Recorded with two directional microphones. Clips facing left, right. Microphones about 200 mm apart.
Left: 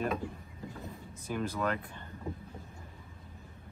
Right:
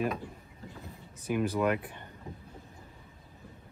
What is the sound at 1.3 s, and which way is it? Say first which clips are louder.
Speech: right 5 dB; 15° right (ahead or behind).